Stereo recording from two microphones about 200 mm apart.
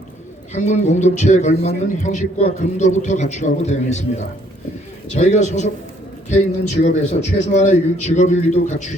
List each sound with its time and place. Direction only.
0.5 s speech: 35° left (ahead or behind)
5.1 s speech: 35° left (ahead or behind)
6.8 s speech: 35° left (ahead or behind)